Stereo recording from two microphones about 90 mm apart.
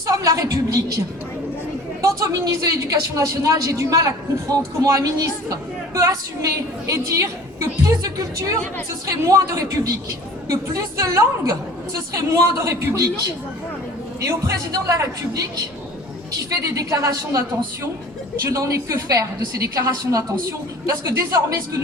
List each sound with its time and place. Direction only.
0.1 s a woman's voice: 40° right (ahead or behind)
14.2 s a woman's voice: 35° right (ahead or behind)
16.6 s a woman's voice: 40° right (ahead or behind)
18.4 s a woman's voice: 35° right (ahead or behind)